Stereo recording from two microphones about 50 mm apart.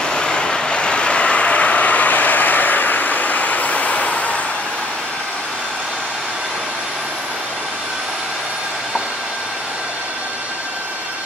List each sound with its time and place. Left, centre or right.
0.0 s vehicle: centre